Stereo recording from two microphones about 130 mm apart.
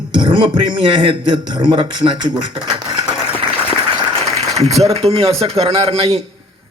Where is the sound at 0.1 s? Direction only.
40° right (ahead or behind).